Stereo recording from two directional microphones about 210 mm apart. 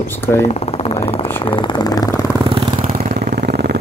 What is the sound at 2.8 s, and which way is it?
Vehicle, 45° right (ahead or behind).